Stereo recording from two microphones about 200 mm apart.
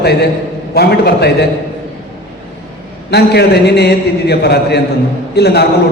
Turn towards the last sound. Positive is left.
turn(degrees=55)  # may be behind; listen again after turning